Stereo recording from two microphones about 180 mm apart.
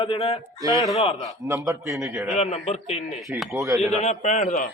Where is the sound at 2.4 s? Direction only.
35° left (ahead or behind).